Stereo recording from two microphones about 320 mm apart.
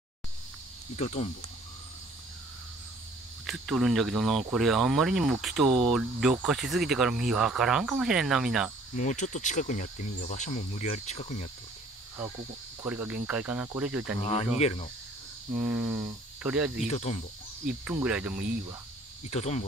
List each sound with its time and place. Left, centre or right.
0.9 s speech: centre
3.4 s speech: centre
8.9 s speech: left
12.8 s speech: centre
14.2 s speech: centre
15.7 s speech: centre
16.8 s speech: centre
17.8 s speech: centre
19.3 s speech: centre